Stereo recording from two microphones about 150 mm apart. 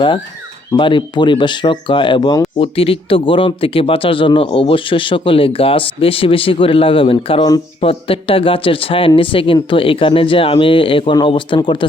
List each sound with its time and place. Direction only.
0.8 s speech: 35° left (ahead or behind)
2.6 s speech: 40° left (ahead or behind)